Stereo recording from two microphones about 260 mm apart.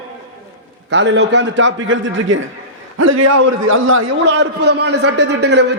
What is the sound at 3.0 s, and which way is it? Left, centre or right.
Speech, right.